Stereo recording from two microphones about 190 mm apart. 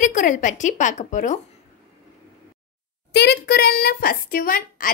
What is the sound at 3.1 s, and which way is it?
Speech, 60° left (ahead or behind).